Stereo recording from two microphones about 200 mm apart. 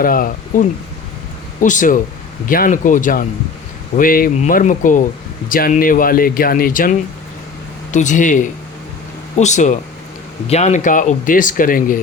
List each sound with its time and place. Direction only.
0.0 s speech: 45° left (ahead or behind)